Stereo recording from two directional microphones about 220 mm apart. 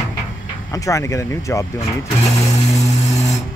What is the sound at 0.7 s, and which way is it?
Speech, 15° left (ahead or behind).